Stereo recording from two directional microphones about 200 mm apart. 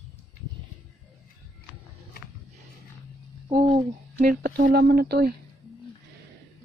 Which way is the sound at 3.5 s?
30° right (ahead or behind).